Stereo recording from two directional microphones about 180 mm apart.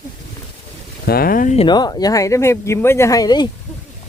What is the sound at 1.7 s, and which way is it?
Speech, 25° left (ahead or behind).